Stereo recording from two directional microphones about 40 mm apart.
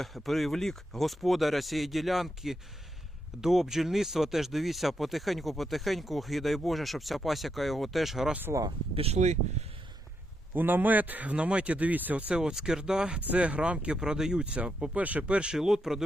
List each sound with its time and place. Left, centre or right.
0.0 s speech: centre
10.5 s a man's voice: right
11.3 s speech: right
12.3 s speech: centre
13.2 s speech: right
14.0 s speech: centre
14.4 s speech: right
15.5 s speech: centre